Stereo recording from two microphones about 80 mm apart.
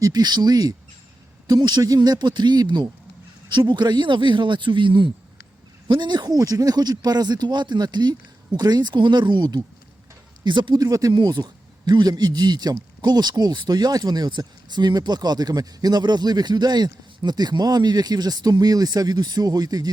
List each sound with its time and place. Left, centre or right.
0.0 s speech: right
3.5 s a man's voice: right
5.9 s speech: right
10.4 s speech: right
10.8 s speech: right
11.1 s speech: right